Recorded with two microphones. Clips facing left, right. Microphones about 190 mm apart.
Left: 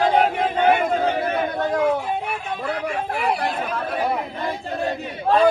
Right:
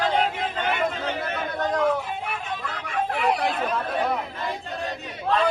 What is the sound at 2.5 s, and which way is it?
Speech, 55° left (ahead or behind).